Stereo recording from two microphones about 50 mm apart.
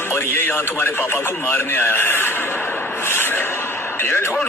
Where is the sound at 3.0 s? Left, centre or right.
Left.